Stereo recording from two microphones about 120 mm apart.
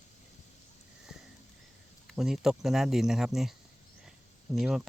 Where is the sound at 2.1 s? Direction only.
5° right (ahead or behind).